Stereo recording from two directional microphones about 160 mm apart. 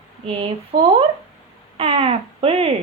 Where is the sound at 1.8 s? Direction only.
35° right (ahead or behind).